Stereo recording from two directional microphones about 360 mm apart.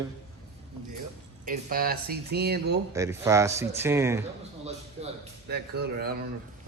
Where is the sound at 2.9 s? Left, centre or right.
Centre.